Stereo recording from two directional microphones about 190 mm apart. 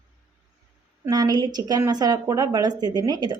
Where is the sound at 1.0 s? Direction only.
20° right (ahead or behind).